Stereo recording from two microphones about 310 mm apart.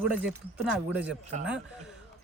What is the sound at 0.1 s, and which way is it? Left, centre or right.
Speech, centre.